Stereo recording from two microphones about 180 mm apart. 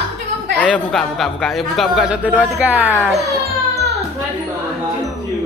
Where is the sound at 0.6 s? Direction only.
5° left (ahead or behind); by 3.2 s 10° right (ahead or behind).